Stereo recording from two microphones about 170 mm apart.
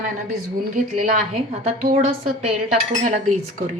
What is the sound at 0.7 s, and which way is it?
A woman's voice, 50° right (ahead or behind).